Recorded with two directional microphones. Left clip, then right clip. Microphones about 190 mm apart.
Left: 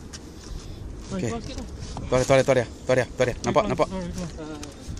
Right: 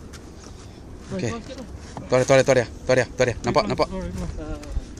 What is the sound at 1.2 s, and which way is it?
Speech, 40° left (ahead or behind).